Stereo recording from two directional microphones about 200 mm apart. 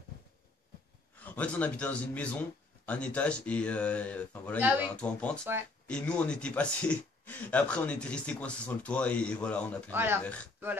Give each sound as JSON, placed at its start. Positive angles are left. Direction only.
{"t": 1.2, "sound": "speech", "side_deg": 5}
{"t": 4.6, "sound": "speech", "side_deg": -10}
{"t": 4.9, "sound": "speech", "side_deg": 5}